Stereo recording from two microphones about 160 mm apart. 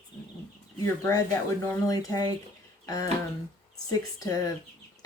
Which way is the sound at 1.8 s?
20° left (ahead or behind).